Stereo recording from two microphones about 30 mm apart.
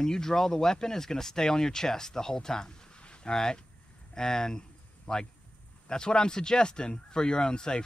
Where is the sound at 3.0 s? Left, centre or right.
Left.